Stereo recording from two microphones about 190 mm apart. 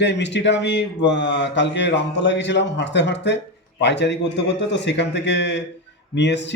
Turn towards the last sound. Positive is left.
turn(degrees=65)  # may be behind; listen again after turning